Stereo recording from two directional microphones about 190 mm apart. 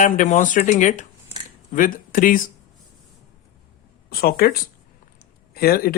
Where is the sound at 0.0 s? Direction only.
40° left (ahead or behind).